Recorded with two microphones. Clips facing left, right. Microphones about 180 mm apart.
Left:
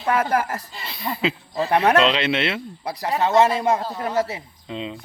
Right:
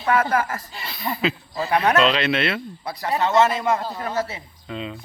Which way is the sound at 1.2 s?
25° left (ahead or behind).